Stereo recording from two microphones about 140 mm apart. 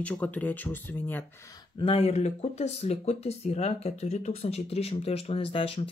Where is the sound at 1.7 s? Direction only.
45° left (ahead or behind).